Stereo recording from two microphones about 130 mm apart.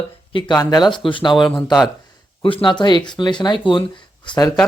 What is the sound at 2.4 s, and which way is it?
Speech, 40° left (ahead or behind).